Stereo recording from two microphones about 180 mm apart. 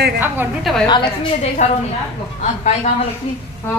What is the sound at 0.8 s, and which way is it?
Speech, 25° left (ahead or behind).